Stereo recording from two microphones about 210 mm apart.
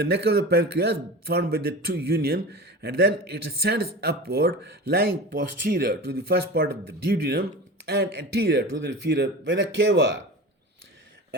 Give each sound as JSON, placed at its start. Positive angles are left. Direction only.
{"t": 0.0, "sound": "speech", "side_deg": -50}